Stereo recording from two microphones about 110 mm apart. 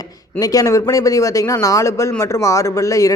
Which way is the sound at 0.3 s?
30° left (ahead or behind).